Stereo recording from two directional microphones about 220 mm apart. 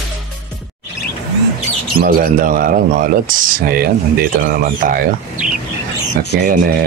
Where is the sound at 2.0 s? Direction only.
40° right (ahead or behind).